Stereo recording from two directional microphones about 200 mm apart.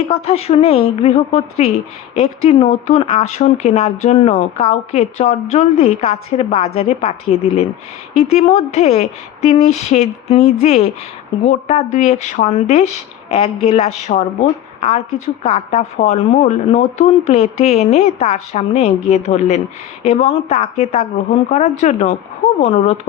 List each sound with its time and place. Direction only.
0.1 s speech: 30° left (ahead or behind)
15.4 s speech: 35° left (ahead or behind)